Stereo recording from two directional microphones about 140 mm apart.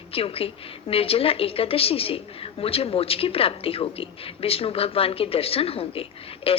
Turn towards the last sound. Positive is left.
turn(degrees=40)  # may be behind; listen again after turning